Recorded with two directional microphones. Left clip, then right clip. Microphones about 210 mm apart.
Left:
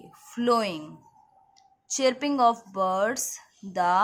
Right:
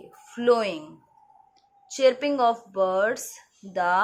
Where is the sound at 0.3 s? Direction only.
25° left (ahead or behind).